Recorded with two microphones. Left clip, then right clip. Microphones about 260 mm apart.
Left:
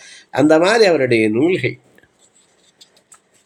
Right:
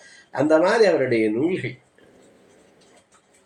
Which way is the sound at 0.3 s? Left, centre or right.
Left.